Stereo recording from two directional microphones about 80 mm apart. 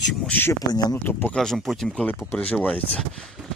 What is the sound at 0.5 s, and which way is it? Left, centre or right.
Speech, left.